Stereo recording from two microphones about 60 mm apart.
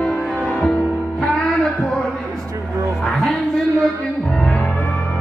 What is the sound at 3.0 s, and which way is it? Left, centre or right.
Music, centre.